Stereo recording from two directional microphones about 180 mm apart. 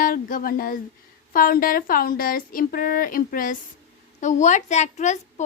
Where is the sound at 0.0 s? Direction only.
50° left (ahead or behind).